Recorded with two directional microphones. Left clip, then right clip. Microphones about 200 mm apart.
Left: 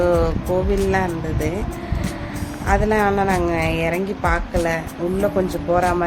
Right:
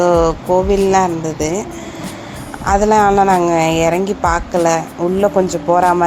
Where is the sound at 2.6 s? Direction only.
20° right (ahead or behind).